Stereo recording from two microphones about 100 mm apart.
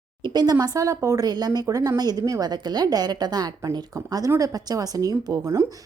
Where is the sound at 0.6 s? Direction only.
35° right (ahead or behind).